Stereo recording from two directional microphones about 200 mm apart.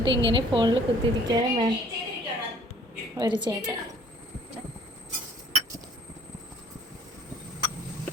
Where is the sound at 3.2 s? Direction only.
20° right (ahead or behind).